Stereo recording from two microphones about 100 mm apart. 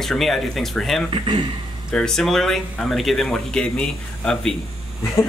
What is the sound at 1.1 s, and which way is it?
Speech, 55° right (ahead or behind).